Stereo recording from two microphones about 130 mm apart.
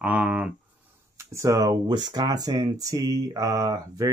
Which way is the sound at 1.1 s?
20° right (ahead or behind).